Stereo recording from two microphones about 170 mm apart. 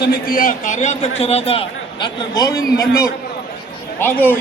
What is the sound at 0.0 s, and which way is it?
A man's voice, 60° left (ahead or behind).